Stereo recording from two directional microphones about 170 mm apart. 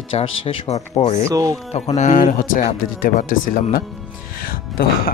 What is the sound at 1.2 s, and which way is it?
Speech, 20° right (ahead or behind).